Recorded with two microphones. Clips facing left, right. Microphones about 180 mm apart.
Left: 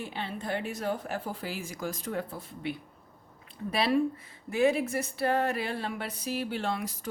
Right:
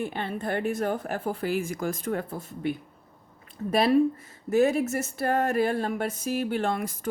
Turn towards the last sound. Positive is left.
turn(degrees=-50)  # may be behind; listen again after turning